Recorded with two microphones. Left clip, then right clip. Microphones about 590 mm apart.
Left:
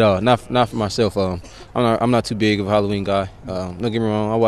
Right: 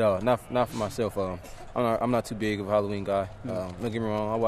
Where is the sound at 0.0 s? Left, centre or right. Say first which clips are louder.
Left 8 dB; left.